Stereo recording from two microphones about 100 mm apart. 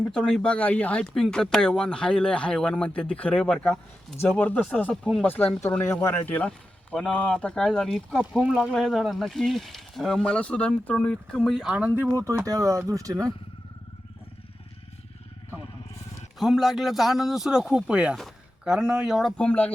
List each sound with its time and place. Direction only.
0.1 s speech: 5° left (ahead or behind); by 6.3 s 25° left (ahead or behind)
6.9 s speech: 10° left (ahead or behind)
8.2 s speech: 10° right (ahead or behind)
8.7 s speech: centre (ahead or behind)
11.4 s speech: 5° right (ahead or behind); by 13.3 s 35° right (ahead or behind)
16.4 s speech: centre (ahead or behind)
19.4 s speech: 10° left (ahead or behind)